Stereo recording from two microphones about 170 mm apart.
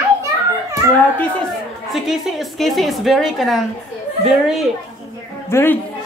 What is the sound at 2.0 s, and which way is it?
A woman's voice, centre (ahead or behind).